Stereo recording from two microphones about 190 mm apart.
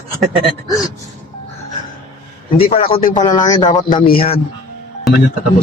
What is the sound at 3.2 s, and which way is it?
A man's voice, 20° left (ahead or behind).